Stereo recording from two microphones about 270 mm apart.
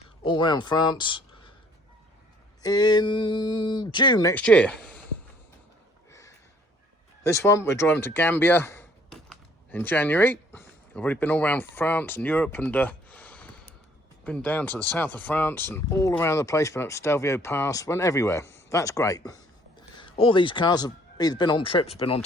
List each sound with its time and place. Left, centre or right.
0.2 s speech: centre
2.6 s speech: centre
6.1 s a sound: centre
7.3 s speech: centre